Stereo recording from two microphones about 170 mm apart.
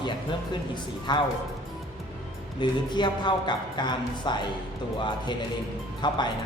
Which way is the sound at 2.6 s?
25° left (ahead or behind).